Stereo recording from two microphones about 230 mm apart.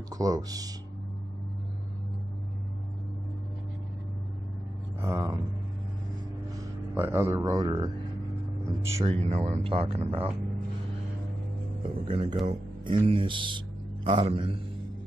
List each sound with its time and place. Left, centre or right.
0.1 s speech: centre
5.0 s speech: centre
6.6 s speech: centre
9.1 s speech: right
12.0 s speech: right